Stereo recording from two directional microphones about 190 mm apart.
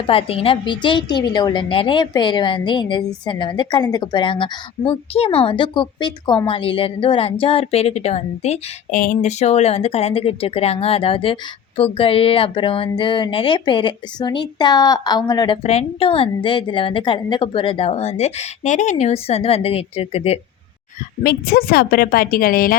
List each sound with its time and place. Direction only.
0.0 s a woman's voice: 30° left (ahead or behind)
15.6 s a woman's voice: 35° left (ahead or behind)
21.2 s a woman's voice: 55° left (ahead or behind)